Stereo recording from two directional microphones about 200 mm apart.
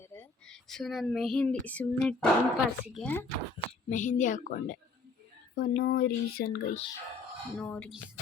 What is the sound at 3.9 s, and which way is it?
A woman's voice, 40° left (ahead or behind).